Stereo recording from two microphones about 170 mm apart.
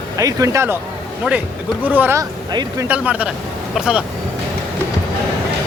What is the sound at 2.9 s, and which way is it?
Speech, 10° right (ahead or behind).